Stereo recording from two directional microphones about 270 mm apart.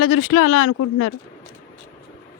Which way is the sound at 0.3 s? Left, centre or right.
Left.